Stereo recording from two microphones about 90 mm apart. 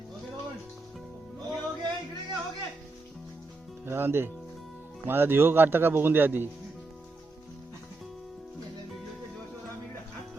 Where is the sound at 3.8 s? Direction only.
25° right (ahead or behind).